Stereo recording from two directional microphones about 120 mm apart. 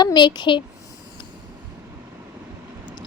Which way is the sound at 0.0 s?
35° left (ahead or behind).